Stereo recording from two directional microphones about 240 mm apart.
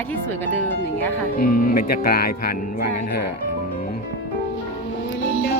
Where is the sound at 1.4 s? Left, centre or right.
Left.